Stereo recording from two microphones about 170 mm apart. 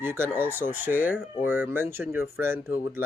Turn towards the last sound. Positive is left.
turn(degrees=-15)  # may be behind; listen again after turning